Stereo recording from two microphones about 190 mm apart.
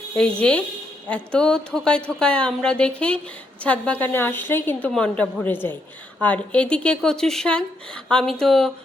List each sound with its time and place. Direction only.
0.1 s a woman's voice: 5° left (ahead or behind)